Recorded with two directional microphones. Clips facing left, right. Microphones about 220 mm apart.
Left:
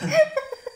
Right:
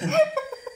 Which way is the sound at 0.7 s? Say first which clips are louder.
Left 2 dB; 10° left (ahead or behind).